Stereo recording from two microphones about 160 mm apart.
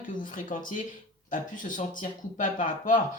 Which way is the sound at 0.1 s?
55° left (ahead or behind).